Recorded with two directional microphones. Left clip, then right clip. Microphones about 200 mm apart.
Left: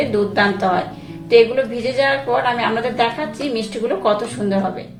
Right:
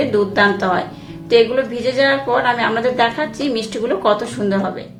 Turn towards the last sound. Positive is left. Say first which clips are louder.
# right 1 dB
turn(degrees=-20)  # may be behind; listen again after turning